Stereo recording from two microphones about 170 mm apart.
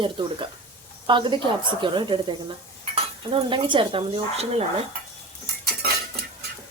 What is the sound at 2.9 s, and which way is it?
Dishes, 35° right (ahead or behind).